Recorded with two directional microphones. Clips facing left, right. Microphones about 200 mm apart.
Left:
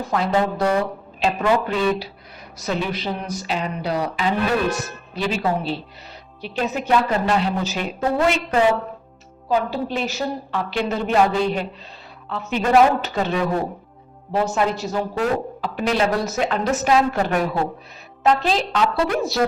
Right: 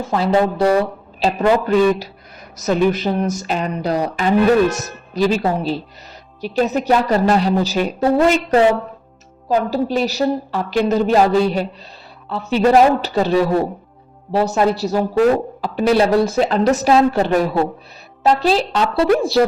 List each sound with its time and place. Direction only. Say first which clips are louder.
0.1 s a woman's voice: right 4 dB; 30° right (ahead or behind)